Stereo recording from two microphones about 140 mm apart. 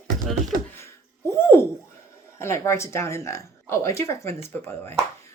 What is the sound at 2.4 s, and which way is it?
Speech, 20° left (ahead or behind).